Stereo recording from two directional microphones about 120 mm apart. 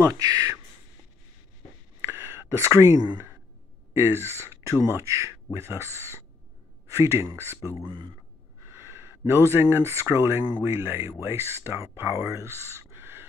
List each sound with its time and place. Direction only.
0.0 s speech: 30° right (ahead or behind)
2.0 s a sound: 20° right (ahead or behind)
3.9 s speech: 20° right (ahead or behind)
8.7 s speech: 20° right (ahead or behind)